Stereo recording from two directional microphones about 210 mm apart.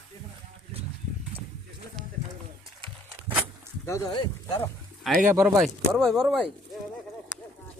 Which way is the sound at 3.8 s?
15° left (ahead or behind).